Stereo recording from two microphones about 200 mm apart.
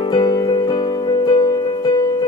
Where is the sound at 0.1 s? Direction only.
20° left (ahead or behind).